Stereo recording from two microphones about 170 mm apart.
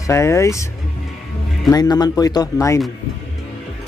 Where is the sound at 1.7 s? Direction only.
25° left (ahead or behind).